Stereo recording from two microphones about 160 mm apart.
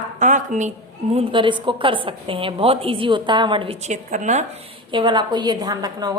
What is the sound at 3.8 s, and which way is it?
Speech, 50° right (ahead or behind).